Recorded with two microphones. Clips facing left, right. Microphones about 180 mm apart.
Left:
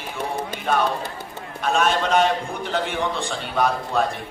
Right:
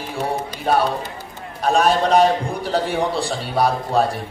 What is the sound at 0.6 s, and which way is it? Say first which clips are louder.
A man's voice: right 3 dB; 35° right (ahead or behind).